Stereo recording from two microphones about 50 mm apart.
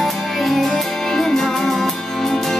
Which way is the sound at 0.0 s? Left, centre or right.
Centre.